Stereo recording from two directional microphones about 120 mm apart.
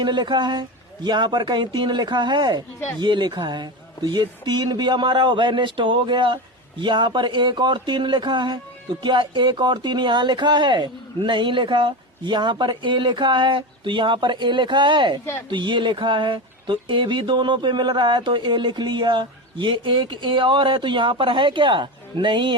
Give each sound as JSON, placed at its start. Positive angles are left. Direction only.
{"t": 0.0, "sound": "speech", "side_deg": -40}